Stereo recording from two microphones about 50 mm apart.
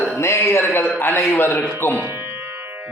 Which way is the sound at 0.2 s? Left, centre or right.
Left.